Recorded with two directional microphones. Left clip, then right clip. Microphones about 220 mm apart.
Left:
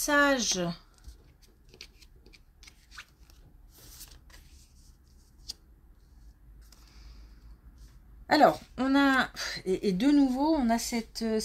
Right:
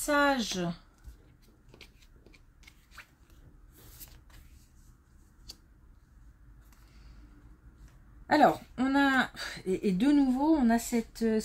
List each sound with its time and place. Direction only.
0.0 s speech: 30° left (ahead or behind)
1.7 s a sound: 15° left (ahead or behind)
8.3 s speech: 30° left (ahead or behind)